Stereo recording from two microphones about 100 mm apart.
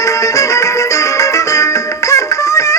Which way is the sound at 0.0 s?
30° left (ahead or behind).